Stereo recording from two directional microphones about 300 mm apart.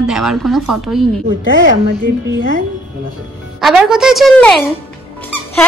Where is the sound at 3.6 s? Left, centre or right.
Centre.